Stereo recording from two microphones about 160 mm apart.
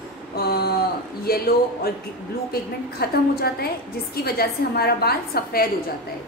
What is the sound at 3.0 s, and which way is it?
A woman's voice, 75° left (ahead or behind).